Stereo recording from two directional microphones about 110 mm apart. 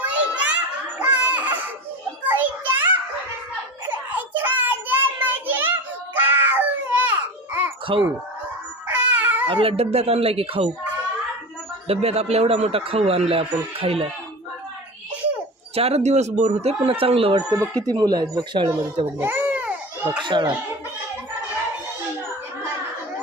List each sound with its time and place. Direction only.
0.0 s children playing: 10° right (ahead or behind)
2.2 s child singing: 15° right (ahead or behind)
7.9 s speech: 50° right (ahead or behind)
8.9 s a sound: 10° right (ahead or behind)
9.5 s a man's voice: 55° right (ahead or behind)
11.9 s a man's voice: 70° right (ahead or behind)
15.7 s speech: 70° right (ahead or behind)
17.5 s speech: 35° right (ahead or behind)
19.2 s baby cry: 15° right (ahead or behind)
20.2 s speech: 45° right (ahead or behind)